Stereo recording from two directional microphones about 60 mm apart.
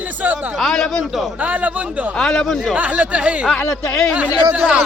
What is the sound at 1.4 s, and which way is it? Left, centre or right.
Speech, right.